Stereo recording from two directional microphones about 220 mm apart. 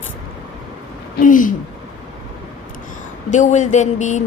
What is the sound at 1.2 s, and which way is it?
Speech, 35° left (ahead or behind).